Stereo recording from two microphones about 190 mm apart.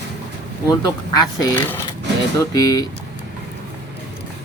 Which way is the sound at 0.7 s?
20° left (ahead or behind).